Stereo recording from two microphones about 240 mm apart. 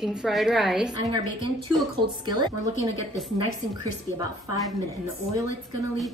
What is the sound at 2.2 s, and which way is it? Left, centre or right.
Speech, centre.